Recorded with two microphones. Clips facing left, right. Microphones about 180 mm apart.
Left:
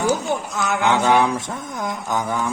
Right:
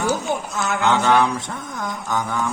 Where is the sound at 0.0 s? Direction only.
15° left (ahead or behind).